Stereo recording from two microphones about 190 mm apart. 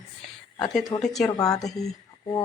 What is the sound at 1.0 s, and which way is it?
Speech, centre (ahead or behind).